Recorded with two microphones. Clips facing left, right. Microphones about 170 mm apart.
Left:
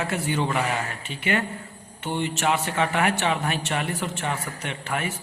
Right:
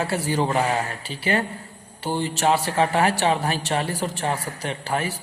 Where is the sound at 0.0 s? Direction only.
35° right (ahead or behind).